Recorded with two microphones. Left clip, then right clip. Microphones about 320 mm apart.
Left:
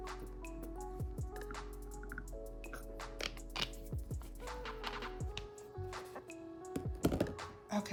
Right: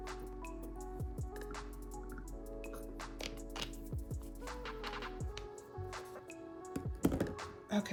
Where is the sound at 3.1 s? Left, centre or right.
Centre.